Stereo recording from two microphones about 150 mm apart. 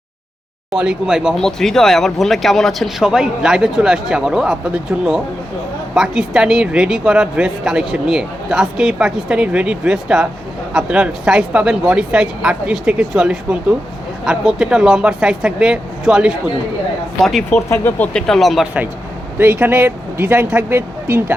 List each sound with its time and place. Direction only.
0.7 s speech: 5° right (ahead or behind)
17.7 s speech: 15° left (ahead or behind)
18.1 s speech: 5° left (ahead or behind); by 21.3 s 15° right (ahead or behind)